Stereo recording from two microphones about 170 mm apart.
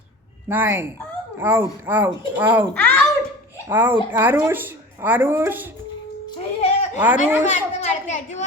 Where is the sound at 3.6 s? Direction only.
10° right (ahead or behind).